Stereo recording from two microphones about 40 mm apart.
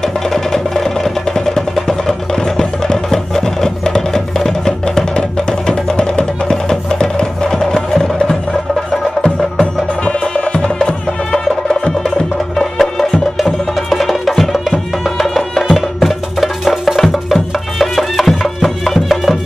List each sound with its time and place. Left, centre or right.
0.0 s music: centre
10.4 s music: left
12.5 s music: centre